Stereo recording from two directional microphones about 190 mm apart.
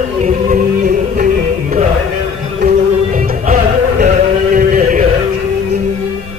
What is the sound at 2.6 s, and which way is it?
Music, 40° right (ahead or behind).